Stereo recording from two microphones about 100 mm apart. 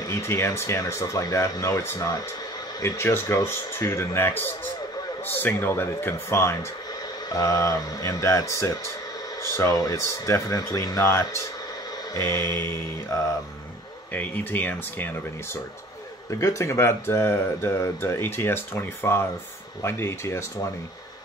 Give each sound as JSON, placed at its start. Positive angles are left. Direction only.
{"t": 0.1, "sound": "speech", "side_deg": 30}
{"t": 14.1, "sound": "speech", "side_deg": 20}
{"t": 16.3, "sound": "speech", "side_deg": 35}